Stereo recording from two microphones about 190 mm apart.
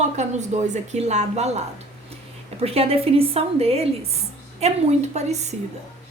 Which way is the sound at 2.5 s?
30° right (ahead or behind).